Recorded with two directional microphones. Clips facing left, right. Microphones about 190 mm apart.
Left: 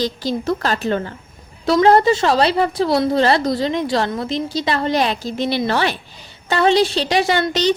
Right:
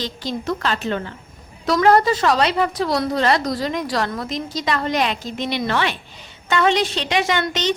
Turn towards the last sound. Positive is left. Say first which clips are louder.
# left 4 dB
turn(degrees=35)  # may be behind; listen again after turning